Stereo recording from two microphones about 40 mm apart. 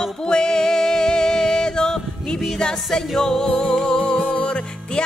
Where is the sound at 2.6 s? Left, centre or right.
Centre.